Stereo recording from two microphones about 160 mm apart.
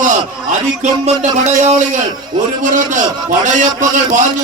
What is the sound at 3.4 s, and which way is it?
Speech, 50° right (ahead or behind).